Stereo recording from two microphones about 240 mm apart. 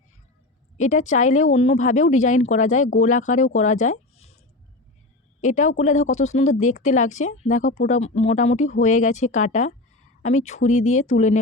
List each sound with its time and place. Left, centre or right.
0.8 s speech: left
5.4 s speech: left